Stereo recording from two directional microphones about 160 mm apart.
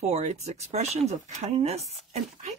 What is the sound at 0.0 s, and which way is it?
Speech, 45° right (ahead or behind).